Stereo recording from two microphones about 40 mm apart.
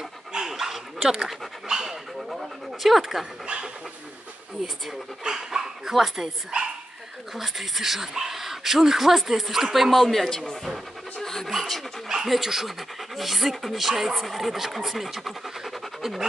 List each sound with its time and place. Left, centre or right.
0.3 s dog: centre
0.6 s dog: centre
3.4 s dog: right
5.2 s dog: centre
5.9 s speech: centre
7.3 s speech: centre
11.1 s pant: centre
11.4 s speech: centre